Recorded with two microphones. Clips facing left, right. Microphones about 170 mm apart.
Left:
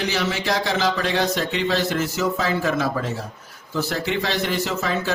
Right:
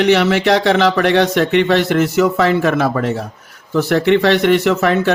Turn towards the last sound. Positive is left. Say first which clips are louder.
# right 10 dB
turn(degrees=-65)  # may be behind; listen again after turning